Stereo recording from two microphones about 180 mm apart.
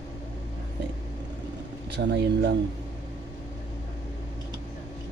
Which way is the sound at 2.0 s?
70° right (ahead or behind).